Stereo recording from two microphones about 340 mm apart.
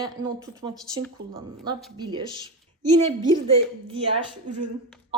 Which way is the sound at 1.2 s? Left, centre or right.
Right.